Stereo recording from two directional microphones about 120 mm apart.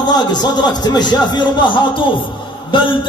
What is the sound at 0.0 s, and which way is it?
A man's voice, 35° left (ahead or behind).